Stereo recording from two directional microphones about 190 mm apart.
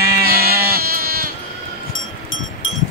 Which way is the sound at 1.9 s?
90° left.